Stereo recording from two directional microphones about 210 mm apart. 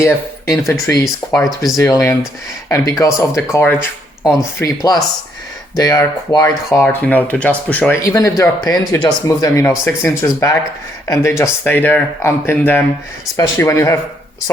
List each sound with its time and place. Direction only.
0.0 s speech: 10° left (ahead or behind)
1.0 s speech: centre (ahead or behind)
1.8 s speech: 10° left (ahead or behind)